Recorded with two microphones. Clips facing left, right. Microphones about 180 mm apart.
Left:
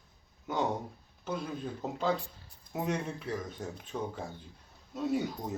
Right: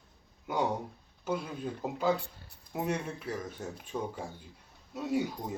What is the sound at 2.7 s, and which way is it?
Speech, 5° right (ahead or behind).